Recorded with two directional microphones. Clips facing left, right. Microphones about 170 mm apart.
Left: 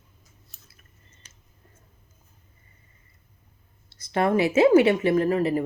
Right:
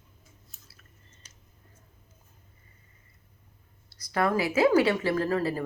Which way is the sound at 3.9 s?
25° left (ahead or behind).